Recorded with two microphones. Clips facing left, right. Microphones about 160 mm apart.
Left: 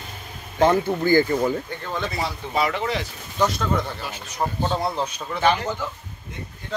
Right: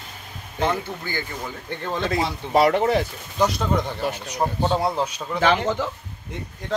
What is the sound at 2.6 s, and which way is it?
Speech, 50° right (ahead or behind).